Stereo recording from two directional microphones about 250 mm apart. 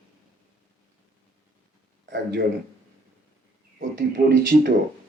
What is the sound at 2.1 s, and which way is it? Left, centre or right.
Speech, right.